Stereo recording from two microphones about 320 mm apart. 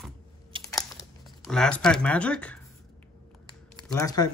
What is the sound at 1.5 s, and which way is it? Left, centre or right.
Speech, centre.